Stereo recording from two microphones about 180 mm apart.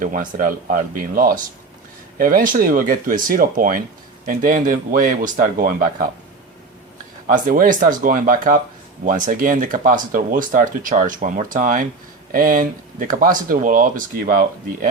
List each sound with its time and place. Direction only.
0.0 s speech: 50° right (ahead or behind)
7.3 s speech: 50° right (ahead or behind)